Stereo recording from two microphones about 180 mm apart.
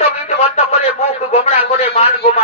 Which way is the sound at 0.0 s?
35° left (ahead or behind).